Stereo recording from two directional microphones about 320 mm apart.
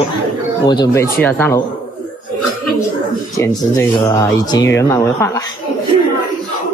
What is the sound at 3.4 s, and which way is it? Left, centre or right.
Speech, centre.